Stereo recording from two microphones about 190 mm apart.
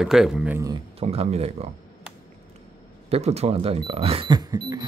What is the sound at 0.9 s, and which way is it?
Speech, 30° right (ahead or behind).